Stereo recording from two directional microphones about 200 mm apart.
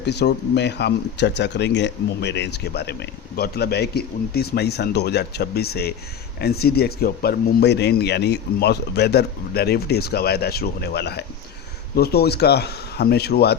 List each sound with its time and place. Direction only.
0.0 s speech: 55° left (ahead or behind)